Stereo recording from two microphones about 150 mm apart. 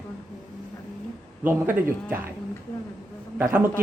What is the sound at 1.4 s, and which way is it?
Speech, 15° right (ahead or behind).